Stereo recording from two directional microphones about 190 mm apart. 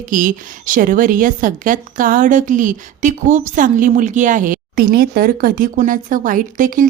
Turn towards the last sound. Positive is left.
turn(degrees=-45)  # may be behind; listen again after turning